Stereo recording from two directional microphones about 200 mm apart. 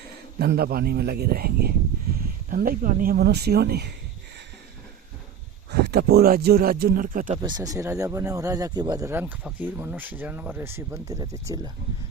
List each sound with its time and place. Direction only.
0.3 s speech: 50° right (ahead or behind)
5.7 s speech: 50° right (ahead or behind)
7.3 s speech: 20° right (ahead or behind)